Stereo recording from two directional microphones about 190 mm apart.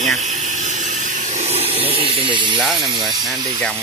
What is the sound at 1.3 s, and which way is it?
Speech, 35° right (ahead or behind).